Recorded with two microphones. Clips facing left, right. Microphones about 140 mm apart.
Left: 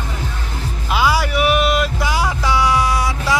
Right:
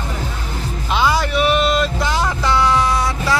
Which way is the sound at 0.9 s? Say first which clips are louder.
Even; 5° left (ahead or behind).